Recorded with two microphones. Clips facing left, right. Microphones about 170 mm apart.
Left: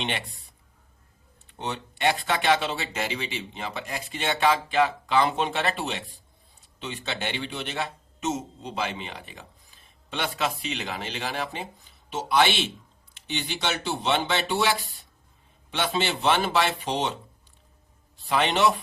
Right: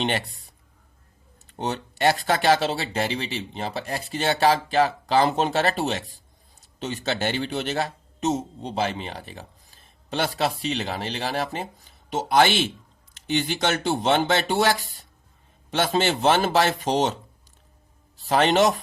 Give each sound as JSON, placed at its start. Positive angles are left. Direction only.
{"t": 0.0, "sound": "a man's voice", "side_deg": -40}
{"t": 1.5, "sound": "a man's voice", "side_deg": -40}
{"t": 15.7, "sound": "speech", "side_deg": -45}
{"t": 18.3, "sound": "speech", "side_deg": -40}